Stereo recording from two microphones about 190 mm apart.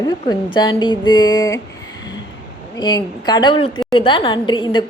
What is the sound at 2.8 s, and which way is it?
A woman's voice, 20° left (ahead or behind).